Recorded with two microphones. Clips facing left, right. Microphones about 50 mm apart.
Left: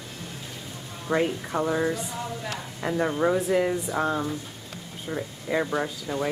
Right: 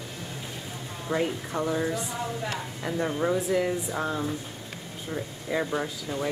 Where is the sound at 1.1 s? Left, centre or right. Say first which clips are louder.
Left 3 dB; centre.